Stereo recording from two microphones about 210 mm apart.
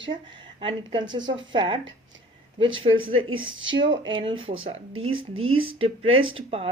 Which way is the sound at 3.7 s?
20° right (ahead or behind).